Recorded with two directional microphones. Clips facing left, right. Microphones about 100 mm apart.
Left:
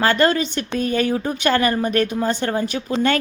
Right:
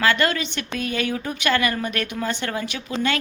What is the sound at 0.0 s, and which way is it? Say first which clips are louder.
Speech: left 4 dB; 35° left (ahead or behind).